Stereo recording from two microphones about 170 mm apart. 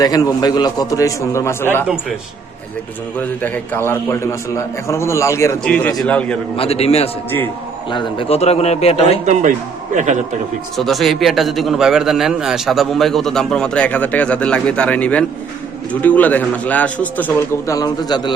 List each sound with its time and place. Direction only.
0.0 s a man's voice: 25° left (ahead or behind)
3.2 s a man's voice: 10° left (ahead or behind)
5.6 s a man's voice: 5° left (ahead or behind)
6.6 s a man's voice: 35° left (ahead or behind)
9.2 s a man's voice: 45° right (ahead or behind)
10.8 s a man's voice: centre (ahead or behind); by 18.3 s 25° left (ahead or behind)